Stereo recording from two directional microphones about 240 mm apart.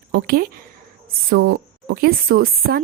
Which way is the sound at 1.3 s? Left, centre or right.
Right.